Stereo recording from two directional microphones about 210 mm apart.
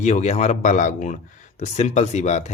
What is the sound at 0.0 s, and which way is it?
Speech, 35° left (ahead or behind).